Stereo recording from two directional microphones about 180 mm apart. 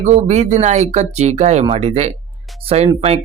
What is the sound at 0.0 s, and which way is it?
Speech, 40° right (ahead or behind).